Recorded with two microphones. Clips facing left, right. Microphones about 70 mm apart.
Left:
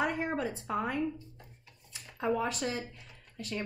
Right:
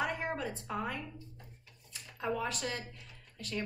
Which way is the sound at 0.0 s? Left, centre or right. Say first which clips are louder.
Left 3 dB; left.